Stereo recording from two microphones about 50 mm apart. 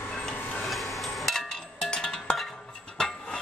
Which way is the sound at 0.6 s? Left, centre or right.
Centre.